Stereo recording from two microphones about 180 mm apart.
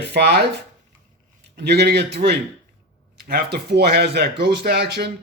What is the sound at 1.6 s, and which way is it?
A man's voice, 65° right (ahead or behind).